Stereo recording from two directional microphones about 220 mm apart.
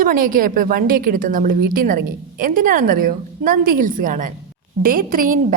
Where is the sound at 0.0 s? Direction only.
40° right (ahead or behind).